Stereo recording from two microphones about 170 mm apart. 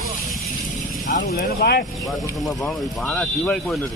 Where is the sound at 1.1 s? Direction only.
50° left (ahead or behind).